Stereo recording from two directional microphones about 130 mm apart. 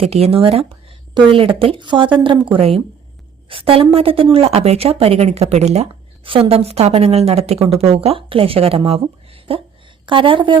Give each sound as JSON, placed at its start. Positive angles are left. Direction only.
{"t": 0.0, "sound": "a woman's voice", "side_deg": -50}
{"t": 2.6, "sound": "a woman's voice", "side_deg": -50}